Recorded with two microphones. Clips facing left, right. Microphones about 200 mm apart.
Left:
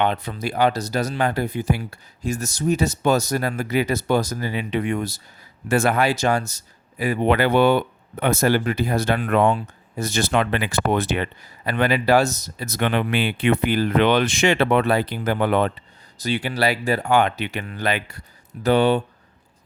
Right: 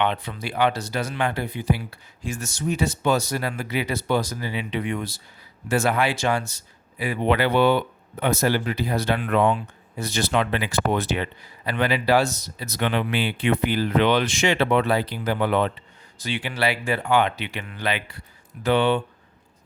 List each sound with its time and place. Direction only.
0.0 s speech: 40° left (ahead or behind)
5.6 s speech: 55° left (ahead or behind)
16.1 s speech: 40° left (ahead or behind)